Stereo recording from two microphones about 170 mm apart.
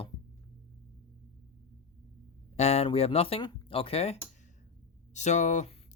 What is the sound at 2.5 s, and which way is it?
Speech, 40° left (ahead or behind).